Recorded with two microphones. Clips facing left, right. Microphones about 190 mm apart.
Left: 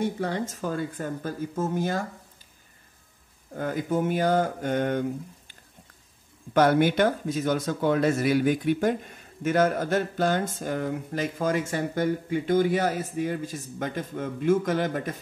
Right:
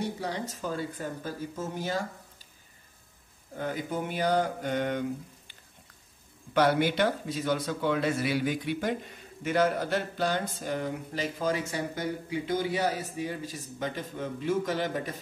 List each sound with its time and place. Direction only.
0.0 s speech: 50° left (ahead or behind)
3.5 s speech: 45° left (ahead or behind)
6.5 s speech: 50° left (ahead or behind)